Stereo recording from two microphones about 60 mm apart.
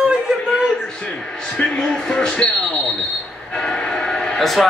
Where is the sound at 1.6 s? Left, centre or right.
Centre.